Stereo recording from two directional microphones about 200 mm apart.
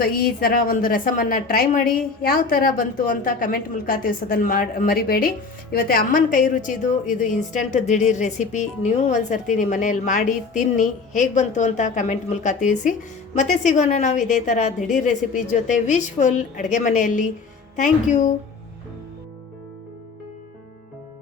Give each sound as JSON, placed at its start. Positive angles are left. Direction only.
{"t": 0.0, "sound": "a woman's voice", "side_deg": 45}